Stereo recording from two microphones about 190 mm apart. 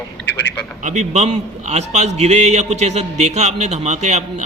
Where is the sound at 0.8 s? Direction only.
40° right (ahead or behind).